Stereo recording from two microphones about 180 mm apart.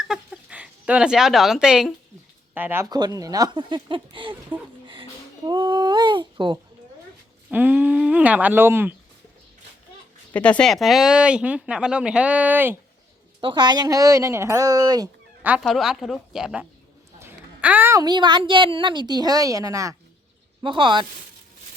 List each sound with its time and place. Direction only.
0.0 s a sound: 5° right (ahead or behind)
2.6 s a woman's voice: 10° right (ahead or behind); by 4.4 s 30° right (ahead or behind)
5.5 s a woman's voice: 25° right (ahead or behind)
7.5 s speech: 10° right (ahead or behind)
10.3 s speech: 5° left (ahead or behind); by 12.7 s 10° right (ahead or behind)
13.4 s a woman's voice: 25° right (ahead or behind)
15.4 s a woman's voice: 5° right (ahead or behind); by 21.1 s 25° right (ahead or behind)